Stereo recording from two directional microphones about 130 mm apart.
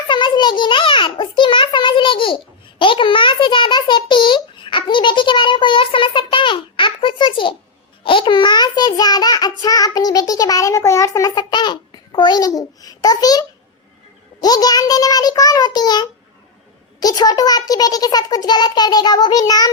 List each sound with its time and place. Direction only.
0.1 s a sound: 35° left (ahead or behind)
8.0 s child singing: 40° left (ahead or behind)
14.4 s child singing: 30° left (ahead or behind)